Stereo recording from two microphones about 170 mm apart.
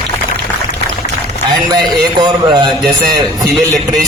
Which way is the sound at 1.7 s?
25° right (ahead or behind).